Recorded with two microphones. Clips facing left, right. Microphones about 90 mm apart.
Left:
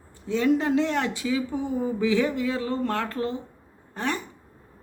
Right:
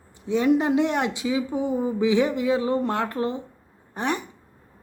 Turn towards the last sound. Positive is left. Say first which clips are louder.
# right 2 dB
turn(degrees=-20)  # may be behind; listen again after turning